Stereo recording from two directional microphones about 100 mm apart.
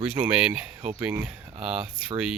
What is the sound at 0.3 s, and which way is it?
Speech, 10° right (ahead or behind).